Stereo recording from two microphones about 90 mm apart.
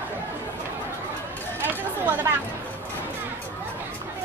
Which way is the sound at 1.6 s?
25° right (ahead or behind).